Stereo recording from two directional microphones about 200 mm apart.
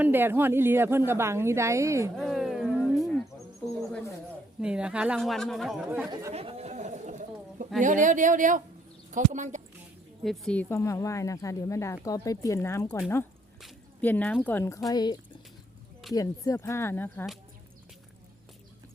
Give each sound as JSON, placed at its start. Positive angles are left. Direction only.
{"t": 0.0, "sound": "a woman's voice", "side_deg": -10}
{"t": 2.1, "sound": "a sound", "side_deg": 0}
{"t": 4.6, "sound": "speech", "side_deg": -5}
{"t": 6.3, "sound": "a sound", "side_deg": -30}
{"t": 7.8, "sound": "speech", "side_deg": -40}
{"t": 10.2, "sound": "speech", "side_deg": 5}